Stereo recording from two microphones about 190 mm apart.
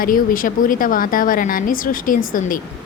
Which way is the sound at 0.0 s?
45° left (ahead or behind).